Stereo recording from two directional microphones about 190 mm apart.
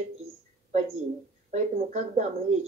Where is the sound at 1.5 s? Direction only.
40° right (ahead or behind).